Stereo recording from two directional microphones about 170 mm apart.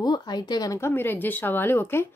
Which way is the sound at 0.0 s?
25° left (ahead or behind).